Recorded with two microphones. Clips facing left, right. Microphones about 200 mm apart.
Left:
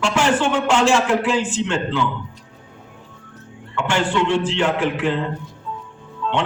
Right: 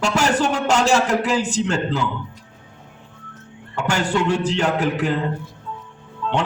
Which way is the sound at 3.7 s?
40° right (ahead or behind).